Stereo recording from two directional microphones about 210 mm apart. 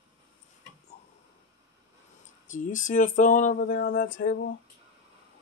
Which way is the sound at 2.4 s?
35° left (ahead or behind).